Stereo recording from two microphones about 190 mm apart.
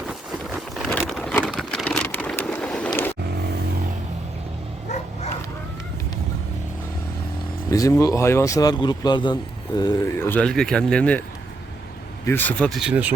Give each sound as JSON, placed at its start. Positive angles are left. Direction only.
{"t": 0.1, "sound": "a sound", "side_deg": 0}
{"t": 7.7, "sound": "speech", "side_deg": 15}
{"t": 12.2, "sound": "speech", "side_deg": 10}
{"t": 12.8, "sound": "speech", "side_deg": -10}